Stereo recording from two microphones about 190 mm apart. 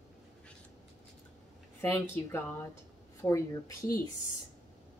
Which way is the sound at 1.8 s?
15° left (ahead or behind).